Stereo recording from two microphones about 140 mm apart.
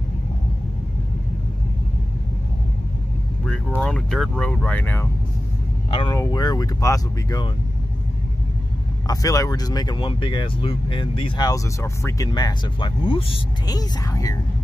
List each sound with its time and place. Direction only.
3.4 s speech: 5° left (ahead or behind)
5.9 s speech: 40° left (ahead or behind)
6.1 s speech: 25° left (ahead or behind)
9.0 s speech: 25° left (ahead or behind)
12.3 s speech: 30° left (ahead or behind)
13.7 s speech: 25° left (ahead or behind)